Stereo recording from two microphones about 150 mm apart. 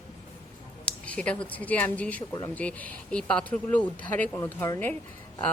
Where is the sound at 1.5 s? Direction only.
10° left (ahead or behind).